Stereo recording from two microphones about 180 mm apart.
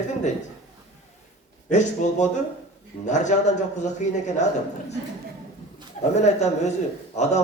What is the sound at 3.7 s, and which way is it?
Speech, 40° left (ahead or behind).